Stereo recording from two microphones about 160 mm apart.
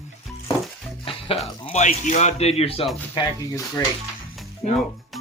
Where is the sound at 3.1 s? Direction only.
20° left (ahead or behind).